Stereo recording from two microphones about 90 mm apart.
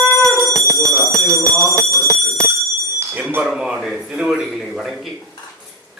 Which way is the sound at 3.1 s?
20° right (ahead or behind).